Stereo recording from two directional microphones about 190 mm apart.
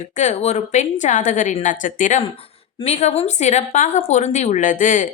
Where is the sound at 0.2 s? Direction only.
35° left (ahead or behind).